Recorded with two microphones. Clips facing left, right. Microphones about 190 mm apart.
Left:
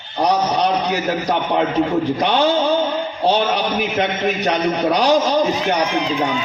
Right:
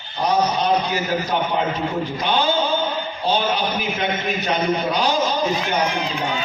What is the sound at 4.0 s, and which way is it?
A man's voice, 70° left (ahead or behind).